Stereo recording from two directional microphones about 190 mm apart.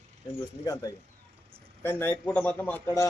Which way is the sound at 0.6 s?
20° left (ahead or behind).